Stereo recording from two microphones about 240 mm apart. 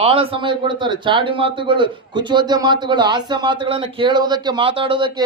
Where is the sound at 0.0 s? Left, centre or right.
Right.